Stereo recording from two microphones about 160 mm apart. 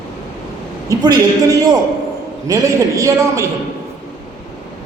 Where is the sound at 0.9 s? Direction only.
20° right (ahead or behind).